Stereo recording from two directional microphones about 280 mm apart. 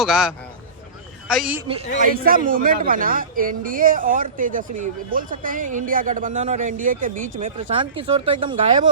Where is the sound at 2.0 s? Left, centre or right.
Right.